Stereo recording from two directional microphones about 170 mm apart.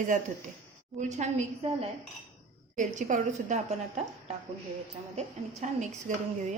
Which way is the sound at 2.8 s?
45° right (ahead or behind).